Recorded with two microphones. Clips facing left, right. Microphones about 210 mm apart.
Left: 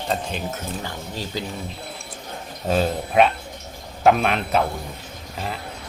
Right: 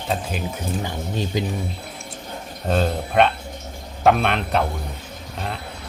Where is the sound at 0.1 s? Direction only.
5° right (ahead or behind).